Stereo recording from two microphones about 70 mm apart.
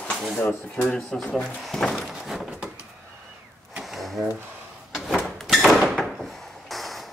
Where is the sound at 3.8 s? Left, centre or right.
Centre.